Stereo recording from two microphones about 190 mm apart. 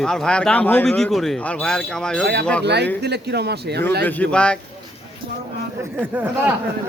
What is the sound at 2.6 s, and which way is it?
Speech, 60° right (ahead or behind).